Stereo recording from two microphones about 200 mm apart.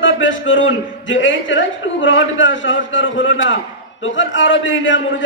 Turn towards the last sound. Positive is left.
turn(degrees=70)  # may be behind; listen again after turning